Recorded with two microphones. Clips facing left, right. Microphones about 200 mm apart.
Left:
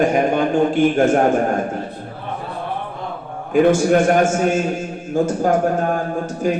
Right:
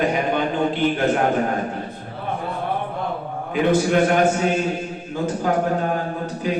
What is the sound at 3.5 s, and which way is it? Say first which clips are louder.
A man's voice: left 4 dB; 45° left (ahead or behind).